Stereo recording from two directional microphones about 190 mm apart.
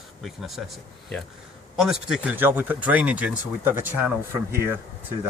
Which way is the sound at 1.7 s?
Centre (ahead or behind).